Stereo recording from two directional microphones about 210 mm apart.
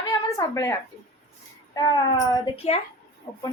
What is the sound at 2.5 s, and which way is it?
Speech, 30° left (ahead or behind).